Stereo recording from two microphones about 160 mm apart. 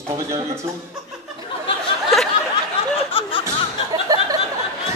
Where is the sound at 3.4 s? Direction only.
25° right (ahead or behind).